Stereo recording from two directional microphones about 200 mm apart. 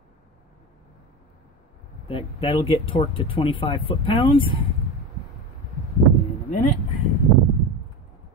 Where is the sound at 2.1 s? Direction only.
25° left (ahead or behind).